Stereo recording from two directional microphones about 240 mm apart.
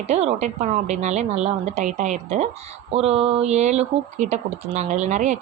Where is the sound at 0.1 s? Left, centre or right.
Right.